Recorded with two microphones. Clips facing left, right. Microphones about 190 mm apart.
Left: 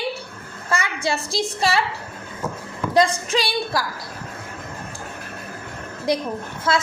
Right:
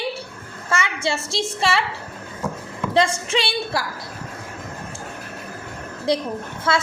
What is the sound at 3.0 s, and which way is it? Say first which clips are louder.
Speech: left 1 dB; 30° right (ahead or behind).